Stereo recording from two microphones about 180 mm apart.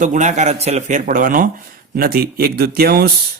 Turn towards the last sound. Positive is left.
turn(degrees=-60)  # may be behind; listen again after turning